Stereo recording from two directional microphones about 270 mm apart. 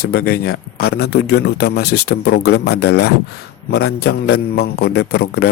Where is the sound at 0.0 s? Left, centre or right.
Left.